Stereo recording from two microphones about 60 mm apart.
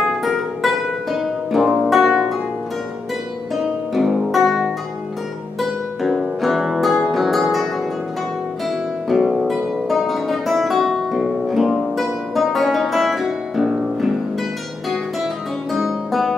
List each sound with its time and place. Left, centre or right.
0.0 s music: centre
3.5 s music: centre
9.1 s music: centre
15.7 s music: centre